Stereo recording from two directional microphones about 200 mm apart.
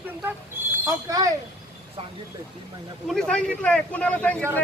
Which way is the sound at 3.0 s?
5° left (ahead or behind).